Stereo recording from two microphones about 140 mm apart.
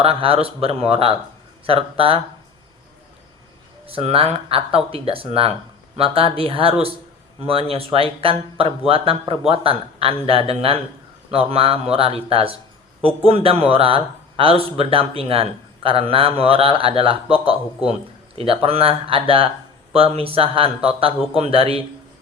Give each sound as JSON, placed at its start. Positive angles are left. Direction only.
{"t": 0.0, "sound": "speech", "side_deg": -45}
{"t": 3.8, "sound": "speech", "side_deg": -40}